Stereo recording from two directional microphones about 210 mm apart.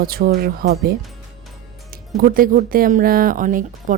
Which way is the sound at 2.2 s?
40° right (ahead or behind).